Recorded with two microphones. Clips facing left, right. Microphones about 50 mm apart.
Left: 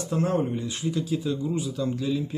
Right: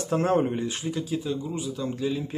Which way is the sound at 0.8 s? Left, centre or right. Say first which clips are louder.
Left 2 dB; right.